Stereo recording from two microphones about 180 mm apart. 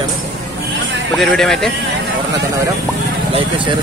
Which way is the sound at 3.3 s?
25° right (ahead or behind).